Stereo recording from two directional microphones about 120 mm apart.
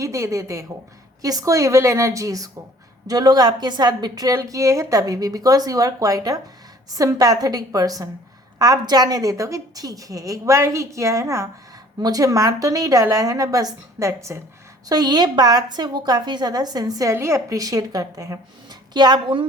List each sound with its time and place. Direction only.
0.0 s a woman's voice: 25° right (ahead or behind)
14.8 s a woman's voice: 35° right (ahead or behind)